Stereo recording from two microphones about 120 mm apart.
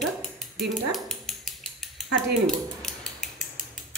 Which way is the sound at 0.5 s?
Centre (ahead or behind).